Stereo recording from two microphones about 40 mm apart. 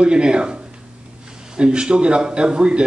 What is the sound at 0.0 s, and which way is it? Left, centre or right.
Speech, right.